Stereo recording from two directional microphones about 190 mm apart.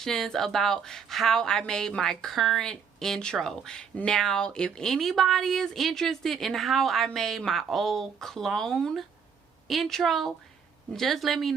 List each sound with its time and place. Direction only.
0.0 s a woman's voice: centre (ahead or behind)